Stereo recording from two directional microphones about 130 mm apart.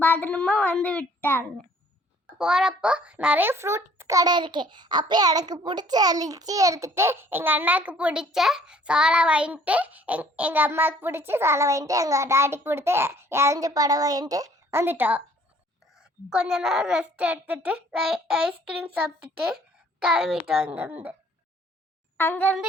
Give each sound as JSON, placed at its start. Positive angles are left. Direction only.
{"t": 0.0, "sound": "child singing", "side_deg": 15}
{"t": 2.2, "sound": "a child's voice", "side_deg": -5}
{"t": 22.2, "sound": "child singing", "side_deg": 15}